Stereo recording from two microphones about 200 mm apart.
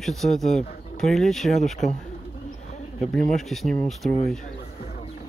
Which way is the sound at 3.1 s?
Centre (ahead or behind).